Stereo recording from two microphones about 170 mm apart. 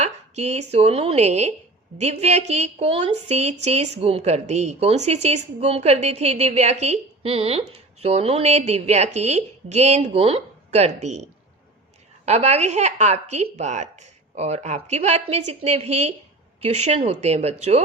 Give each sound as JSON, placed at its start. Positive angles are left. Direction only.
{"t": 0.0, "sound": "a woman's voice", "side_deg": -40}